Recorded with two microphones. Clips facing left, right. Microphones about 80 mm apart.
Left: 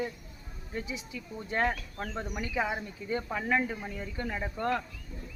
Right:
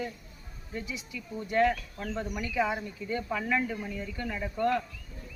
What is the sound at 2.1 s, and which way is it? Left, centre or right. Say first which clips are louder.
Speech: right 2 dB; left.